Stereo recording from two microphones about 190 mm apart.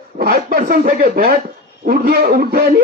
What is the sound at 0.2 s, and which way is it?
A man's voice, 50° right (ahead or behind).